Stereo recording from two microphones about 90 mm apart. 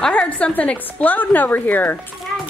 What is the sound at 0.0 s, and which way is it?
A woman's voice, 10° left (ahead or behind).